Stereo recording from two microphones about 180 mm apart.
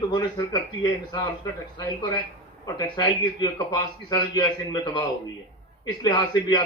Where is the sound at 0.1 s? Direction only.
25° left (ahead or behind).